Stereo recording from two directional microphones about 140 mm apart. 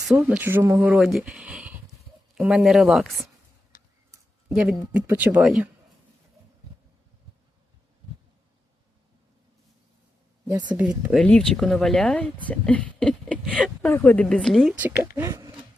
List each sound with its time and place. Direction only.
0.1 s speech: 5° right (ahead or behind)
0.9 s speech: 5° right (ahead or behind)
4.5 s speech: 5° right (ahead or behind)
10.8 s speech: 10° right (ahead or behind)
11.2 s speech: 5° left (ahead or behind)
14.8 s speech: 15° right (ahead or behind)